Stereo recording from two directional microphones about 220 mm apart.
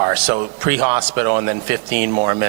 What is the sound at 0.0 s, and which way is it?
Speech, 15° right (ahead or behind).